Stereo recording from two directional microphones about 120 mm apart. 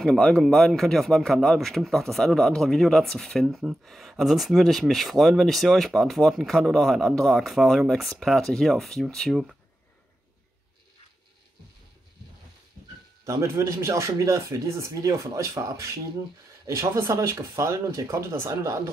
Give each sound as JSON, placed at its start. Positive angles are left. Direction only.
{"t": 0.0, "sound": "speech", "side_deg": 5}
{"t": 13.2, "sound": "speech", "side_deg": -25}